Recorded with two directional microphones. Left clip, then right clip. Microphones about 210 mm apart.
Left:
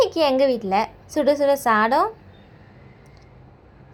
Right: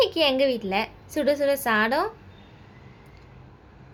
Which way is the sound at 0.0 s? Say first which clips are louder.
Left 3 dB; 15° left (ahead or behind).